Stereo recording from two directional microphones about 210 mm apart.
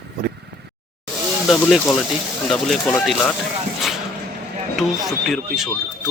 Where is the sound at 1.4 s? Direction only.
5° left (ahead or behind).